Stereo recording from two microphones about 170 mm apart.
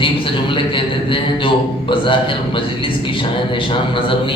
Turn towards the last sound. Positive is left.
turn(degrees=30)  # may be behind; listen again after turning